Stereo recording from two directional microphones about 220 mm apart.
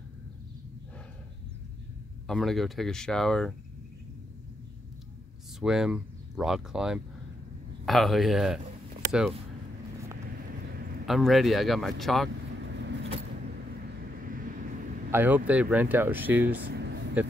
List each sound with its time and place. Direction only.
2.2 s speech: centre (ahead or behind)
5.6 s speech: 5° right (ahead or behind)
11.1 s speech: centre (ahead or behind)
12.6 s vehicle: 50° right (ahead or behind)
14.1 s vehicle: 40° right (ahead or behind)
15.0 s speech: 10° right (ahead or behind)
16.6 s a sound: 50° right (ahead or behind)